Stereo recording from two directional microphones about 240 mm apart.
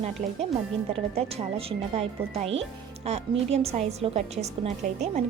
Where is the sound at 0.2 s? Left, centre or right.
Right.